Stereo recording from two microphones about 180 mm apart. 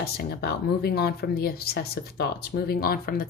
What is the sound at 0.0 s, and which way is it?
Speech, 65° left (ahead or behind).